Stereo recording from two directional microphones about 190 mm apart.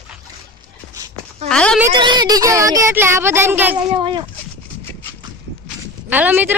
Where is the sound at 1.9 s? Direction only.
25° right (ahead or behind).